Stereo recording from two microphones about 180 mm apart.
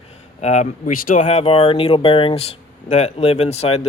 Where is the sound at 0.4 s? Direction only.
40° left (ahead or behind).